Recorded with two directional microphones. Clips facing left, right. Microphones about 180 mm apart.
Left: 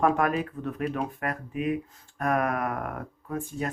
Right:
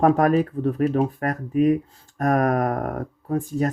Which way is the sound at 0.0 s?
35° right (ahead or behind).